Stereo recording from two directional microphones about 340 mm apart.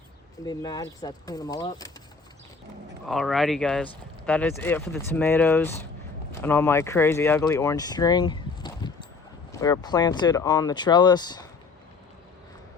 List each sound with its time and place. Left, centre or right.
0.4 s speech: centre
3.1 s speech: centre